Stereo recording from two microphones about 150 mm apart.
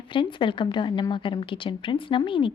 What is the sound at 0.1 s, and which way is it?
A woman's voice, 30° left (ahead or behind).